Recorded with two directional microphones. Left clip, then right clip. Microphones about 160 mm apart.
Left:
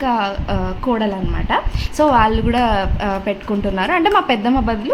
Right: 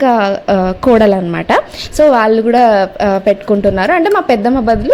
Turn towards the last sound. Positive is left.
turn(degrees=-25)  # may be behind; listen again after turning